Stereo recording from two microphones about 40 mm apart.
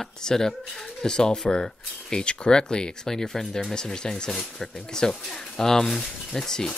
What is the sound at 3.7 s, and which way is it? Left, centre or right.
Speech, centre.